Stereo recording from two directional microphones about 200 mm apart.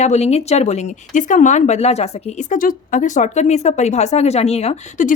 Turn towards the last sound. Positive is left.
turn(degrees=40)  # may be behind; listen again after turning